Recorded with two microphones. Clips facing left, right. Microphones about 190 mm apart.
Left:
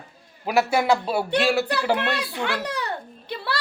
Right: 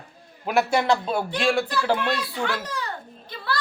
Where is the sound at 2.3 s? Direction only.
70° left (ahead or behind).